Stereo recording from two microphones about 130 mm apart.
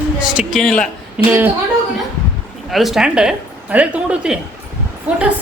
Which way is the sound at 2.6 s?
Centre (ahead or behind).